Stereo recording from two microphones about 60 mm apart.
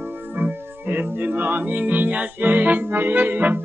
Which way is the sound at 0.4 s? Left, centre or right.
Right.